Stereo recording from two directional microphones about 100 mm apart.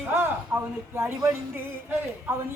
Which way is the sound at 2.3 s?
20° right (ahead or behind).